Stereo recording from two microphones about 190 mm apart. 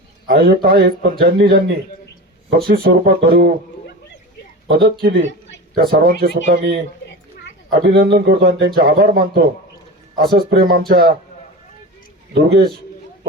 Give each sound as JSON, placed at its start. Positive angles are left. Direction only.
{"t": 0.3, "sound": "speech", "side_deg": -50}
{"t": 4.7, "sound": "a man's voice", "side_deg": -50}
{"t": 12.3, "sound": "a man's voice", "side_deg": -55}